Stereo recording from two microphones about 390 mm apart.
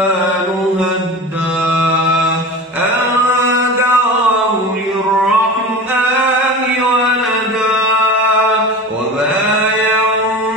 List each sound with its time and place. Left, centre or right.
3.3 s music: centre